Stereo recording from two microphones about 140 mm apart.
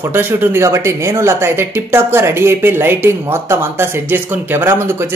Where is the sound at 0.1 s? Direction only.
15° right (ahead or behind).